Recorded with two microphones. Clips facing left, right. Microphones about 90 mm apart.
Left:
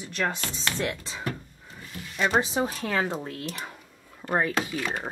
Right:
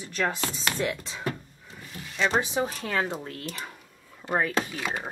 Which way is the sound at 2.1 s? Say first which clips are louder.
Left 1 dB; 10° left (ahead or behind).